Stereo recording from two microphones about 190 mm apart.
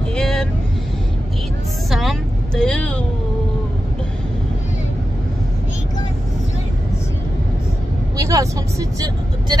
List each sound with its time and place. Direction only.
0.1 s vehicle: 5° left (ahead or behind)
1.9 s vehicle: centre (ahead or behind)
8.2 s vehicle: 15° right (ahead or behind)